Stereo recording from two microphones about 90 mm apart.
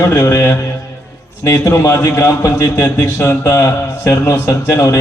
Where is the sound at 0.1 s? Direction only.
35° left (ahead or behind).